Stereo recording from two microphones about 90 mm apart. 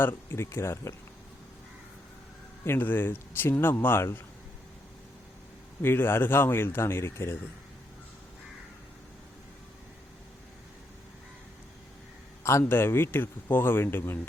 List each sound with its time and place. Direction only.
0.0 s a man's voice: 25° left (ahead or behind)
2.6 s a man's voice: 20° left (ahead or behind)
5.8 s a man's voice: 25° left (ahead or behind)
12.4 s a man's voice: 30° left (ahead or behind)